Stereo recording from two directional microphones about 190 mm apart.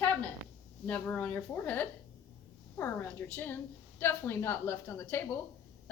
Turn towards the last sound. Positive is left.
turn(degrees=10)  # may be behind; listen again after turning